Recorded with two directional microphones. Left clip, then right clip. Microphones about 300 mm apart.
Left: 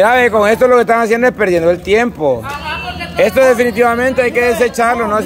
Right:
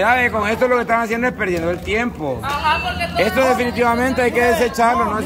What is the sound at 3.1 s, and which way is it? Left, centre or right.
Speech, centre.